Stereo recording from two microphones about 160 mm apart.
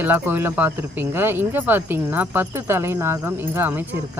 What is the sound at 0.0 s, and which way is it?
Speech, 10° right (ahead or behind).